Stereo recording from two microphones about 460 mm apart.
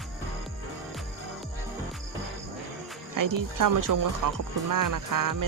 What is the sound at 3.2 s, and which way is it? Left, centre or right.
Speech, right.